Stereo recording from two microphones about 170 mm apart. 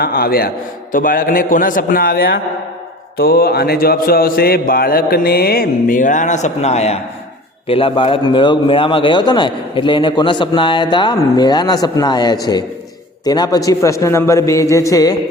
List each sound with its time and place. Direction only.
0.0 s a man's voice: 60° left (ahead or behind); by 15.1 s 20° left (ahead or behind)